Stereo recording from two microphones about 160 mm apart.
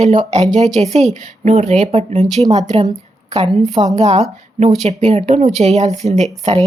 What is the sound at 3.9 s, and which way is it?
A woman's voice, 45° right (ahead or behind).